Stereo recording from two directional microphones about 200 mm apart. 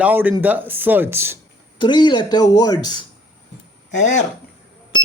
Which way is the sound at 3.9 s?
40° left (ahead or behind).